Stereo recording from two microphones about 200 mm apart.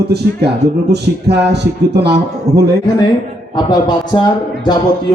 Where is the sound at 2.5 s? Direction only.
35° right (ahead or behind).